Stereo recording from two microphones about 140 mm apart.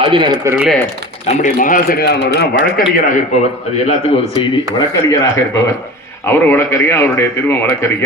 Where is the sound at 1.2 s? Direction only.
55° left (ahead or behind); by 2.0 s 85° left.